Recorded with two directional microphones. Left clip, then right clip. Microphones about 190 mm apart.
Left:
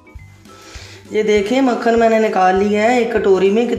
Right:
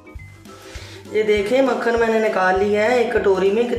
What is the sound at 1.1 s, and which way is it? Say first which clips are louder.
Speech: left 2 dB; 50° left (ahead or behind).